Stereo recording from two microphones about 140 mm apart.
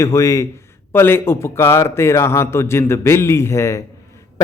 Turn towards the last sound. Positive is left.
turn(degrees=20)  # may be behind; listen again after turning